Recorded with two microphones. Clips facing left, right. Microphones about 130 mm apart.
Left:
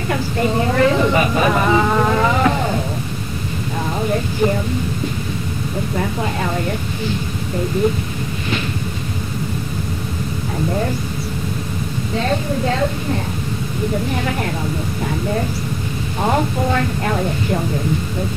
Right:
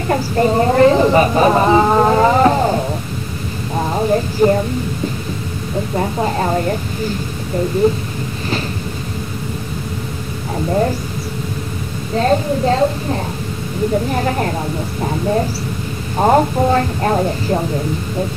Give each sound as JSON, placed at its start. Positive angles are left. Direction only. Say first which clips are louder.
{"t": 0.1, "sound": "a woman's voice", "louder": "right 5 dB", "side_deg": -40}
{"t": 4.4, "sound": "a woman's voice", "louder": "right 5 dB", "side_deg": -40}
{"t": 5.9, "sound": "a woman's voice", "louder": "right 5 dB", "side_deg": -35}
{"t": 7.8, "sound": "a woman's voice", "louder": "right 4 dB", "side_deg": -30}
{"t": 12.2, "sound": "a woman's voice", "louder": "right 5 dB", "side_deg": -35}
{"t": 16.2, "sound": "a woman's voice", "louder": "right 6 dB", "side_deg": -35}